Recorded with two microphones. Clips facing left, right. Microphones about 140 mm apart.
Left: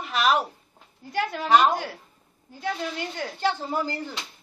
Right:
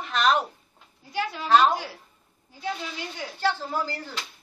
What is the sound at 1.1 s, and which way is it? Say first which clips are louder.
Speech: left 2 dB; 55° left (ahead or behind).